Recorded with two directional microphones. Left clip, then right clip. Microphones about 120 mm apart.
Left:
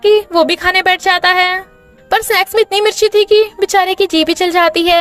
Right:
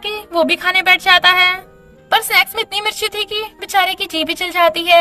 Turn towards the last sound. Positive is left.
turn(degrees=55)  # may be behind; listen again after turning